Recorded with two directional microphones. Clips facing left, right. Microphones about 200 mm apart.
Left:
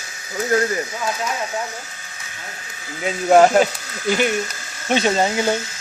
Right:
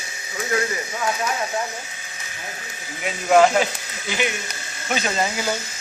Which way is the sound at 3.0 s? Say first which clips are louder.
Left 3 dB; 40° left (ahead or behind).